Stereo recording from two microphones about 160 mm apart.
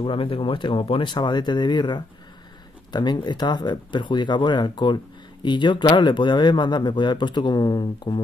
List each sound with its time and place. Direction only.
0.0 s speech: 35° left (ahead or behind)